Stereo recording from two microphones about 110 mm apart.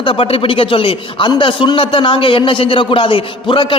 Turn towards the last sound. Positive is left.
turn(degrees=50)  # may be behind; listen again after turning